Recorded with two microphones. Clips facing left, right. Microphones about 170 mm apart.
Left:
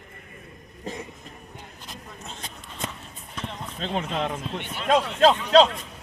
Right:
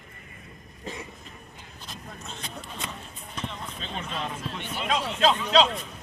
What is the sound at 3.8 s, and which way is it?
Speech, 85° left.